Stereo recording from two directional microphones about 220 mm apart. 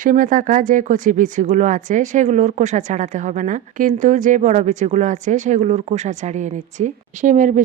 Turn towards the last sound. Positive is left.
turn(degrees=-35)  # may be behind; listen again after turning